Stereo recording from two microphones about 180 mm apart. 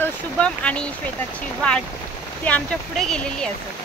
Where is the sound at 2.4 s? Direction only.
5° left (ahead or behind).